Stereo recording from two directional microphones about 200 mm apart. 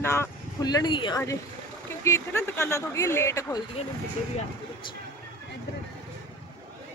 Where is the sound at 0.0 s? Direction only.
15° left (ahead or behind).